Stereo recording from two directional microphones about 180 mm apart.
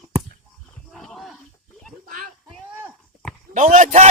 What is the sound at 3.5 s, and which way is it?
Speech, 45° right (ahead or behind).